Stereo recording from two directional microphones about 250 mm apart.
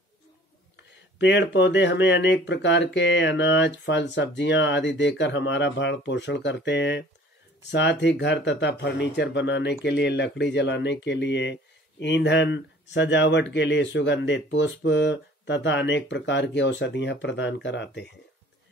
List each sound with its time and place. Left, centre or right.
1.1 s speech: left